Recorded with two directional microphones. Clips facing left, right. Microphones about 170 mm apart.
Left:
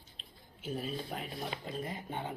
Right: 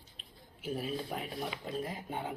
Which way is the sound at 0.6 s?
5° right (ahead or behind).